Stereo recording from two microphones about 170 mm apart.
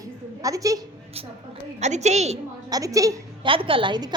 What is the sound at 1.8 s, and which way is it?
Speech, 40° right (ahead or behind).